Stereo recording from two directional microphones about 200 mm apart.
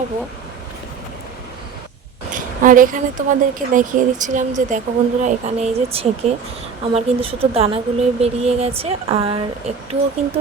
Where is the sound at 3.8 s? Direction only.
40° right (ahead or behind).